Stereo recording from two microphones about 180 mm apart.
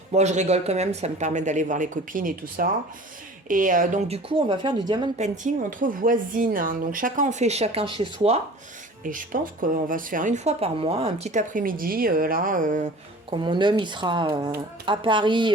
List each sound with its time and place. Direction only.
0.1 s speech: 40° right (ahead or behind)
4.3 s a woman's voice: 25° right (ahead or behind)
5.4 s speech: 50° right (ahead or behind); by 8.0 s 30° right (ahead or behind)
9.0 s speech: 50° right (ahead or behind)
13.3 s a woman's voice: 25° right (ahead or behind)